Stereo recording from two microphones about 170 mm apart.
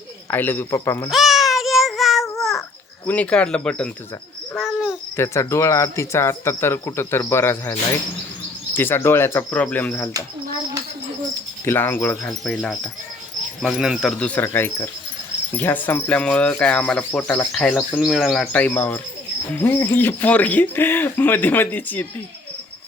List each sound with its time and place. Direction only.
0.3 s speech: 10° left (ahead or behind)
1.1 s a sound: centre (ahead or behind)
3.1 s speech: 10° left (ahead or behind)
4.5 s cricket: 5° right (ahead or behind)
5.1 s speech: 15° left (ahead or behind)
11.6 s speech: 15° left (ahead or behind)